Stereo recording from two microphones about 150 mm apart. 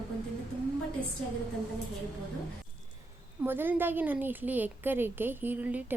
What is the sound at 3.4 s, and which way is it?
A woman's voice, 15° right (ahead or behind).